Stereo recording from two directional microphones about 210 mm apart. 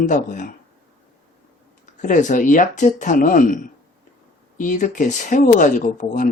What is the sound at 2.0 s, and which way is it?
Speech, 35° left (ahead or behind).